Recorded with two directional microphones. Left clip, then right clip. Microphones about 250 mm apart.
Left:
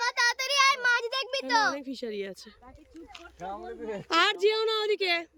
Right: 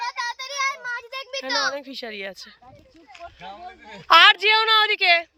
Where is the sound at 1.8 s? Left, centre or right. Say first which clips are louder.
Right 3 dB; centre.